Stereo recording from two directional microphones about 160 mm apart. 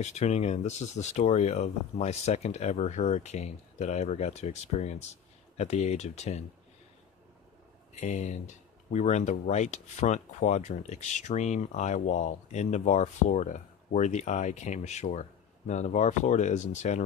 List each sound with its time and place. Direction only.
0.0 s speech: 45° left (ahead or behind)
7.9 s speech: 50° left (ahead or behind)